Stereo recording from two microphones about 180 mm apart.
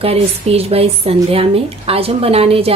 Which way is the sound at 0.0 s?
35° right (ahead or behind).